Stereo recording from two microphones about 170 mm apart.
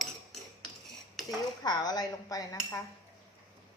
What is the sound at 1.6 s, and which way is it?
A woman's voice, 25° left (ahead or behind).